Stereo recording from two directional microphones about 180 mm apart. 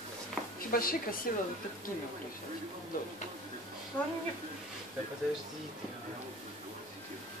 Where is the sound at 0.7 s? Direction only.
50° left (ahead or behind).